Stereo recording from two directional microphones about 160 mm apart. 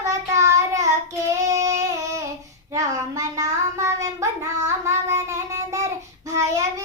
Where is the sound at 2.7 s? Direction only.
20° right (ahead or behind).